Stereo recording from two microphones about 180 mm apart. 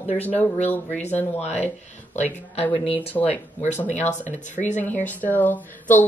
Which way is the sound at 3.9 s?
40° left (ahead or behind).